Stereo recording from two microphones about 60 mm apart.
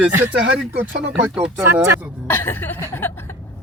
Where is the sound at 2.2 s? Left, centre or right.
Left.